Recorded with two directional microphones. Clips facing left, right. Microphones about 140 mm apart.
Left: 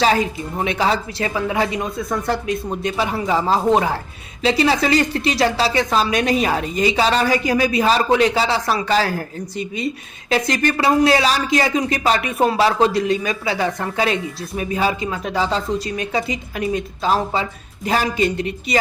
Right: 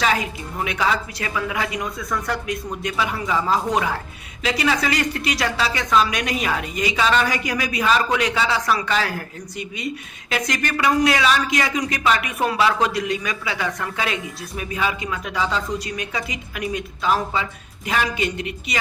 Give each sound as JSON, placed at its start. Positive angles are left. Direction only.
{"t": 0.0, "sound": "a woman's voice", "side_deg": 30}